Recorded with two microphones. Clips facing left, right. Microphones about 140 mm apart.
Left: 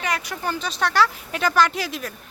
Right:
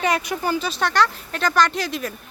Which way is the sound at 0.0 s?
25° right (ahead or behind).